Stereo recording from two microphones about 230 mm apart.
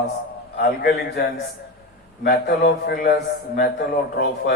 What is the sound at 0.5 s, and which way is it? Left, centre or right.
Speech, left.